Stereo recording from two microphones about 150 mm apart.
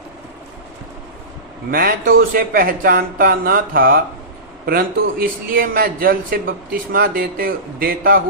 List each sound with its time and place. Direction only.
1.7 s a man's voice: 80° right